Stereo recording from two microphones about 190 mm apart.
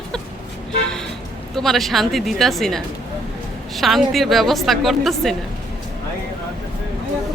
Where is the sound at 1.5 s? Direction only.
Centre (ahead or behind).